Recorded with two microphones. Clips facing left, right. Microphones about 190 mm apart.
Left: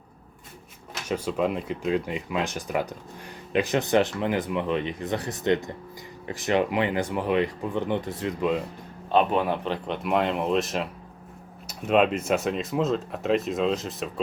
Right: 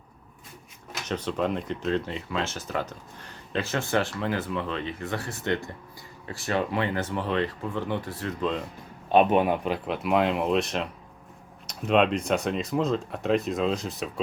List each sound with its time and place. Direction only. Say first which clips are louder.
1.0 s speech: left 2 dB; 10° left (ahead or behind)
9.1 s speech: right 2 dB; 15° right (ahead or behind); by 14.1 s centre (ahead or behind)